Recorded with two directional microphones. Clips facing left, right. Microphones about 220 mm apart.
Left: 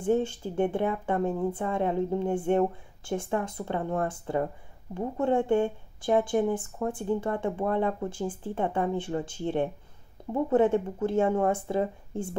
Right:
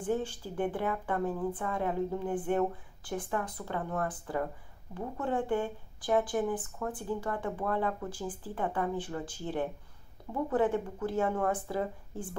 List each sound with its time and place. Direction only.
0.0 s speech: 25° left (ahead or behind)